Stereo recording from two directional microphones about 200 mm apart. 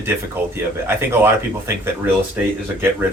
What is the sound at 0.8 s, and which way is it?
Speech, 10° right (ahead or behind).